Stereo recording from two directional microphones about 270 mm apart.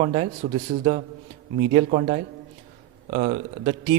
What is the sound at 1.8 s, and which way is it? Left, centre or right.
A man's voice, right.